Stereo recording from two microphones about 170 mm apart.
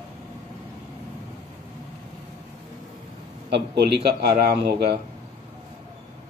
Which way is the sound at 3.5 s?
80° right.